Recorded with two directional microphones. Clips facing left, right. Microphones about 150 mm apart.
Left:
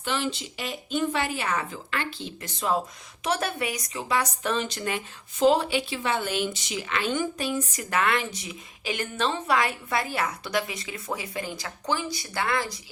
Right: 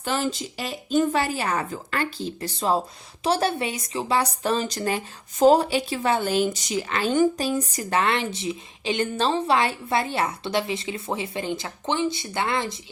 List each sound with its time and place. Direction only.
0.0 s a woman's voice: 40° right (ahead or behind); by 12.8 s 25° right (ahead or behind)